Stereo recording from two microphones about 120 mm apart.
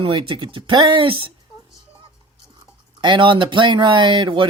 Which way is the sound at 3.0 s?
40° right (ahead or behind).